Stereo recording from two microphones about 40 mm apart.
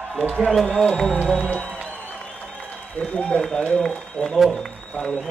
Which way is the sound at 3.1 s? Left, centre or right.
Left.